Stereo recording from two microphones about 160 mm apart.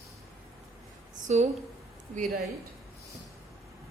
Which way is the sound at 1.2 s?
45° right (ahead or behind).